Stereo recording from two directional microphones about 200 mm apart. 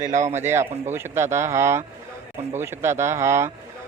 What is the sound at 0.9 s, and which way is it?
A man's voice, 10° right (ahead or behind).